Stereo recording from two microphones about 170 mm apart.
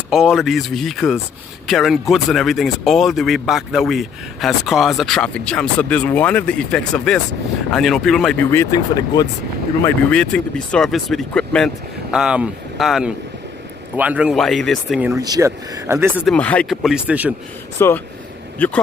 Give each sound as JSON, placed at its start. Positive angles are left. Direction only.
{"t": 0.1, "sound": "a man's voice", "side_deg": 0}
{"t": 8.5, "sound": "speech", "side_deg": 20}
{"t": 9.8, "sound": "a man's voice", "side_deg": 5}
{"t": 15.0, "sound": "speech", "side_deg": -10}
{"t": 16.3, "sound": "a man's voice", "side_deg": 10}
{"t": 17.7, "sound": "speech", "side_deg": 15}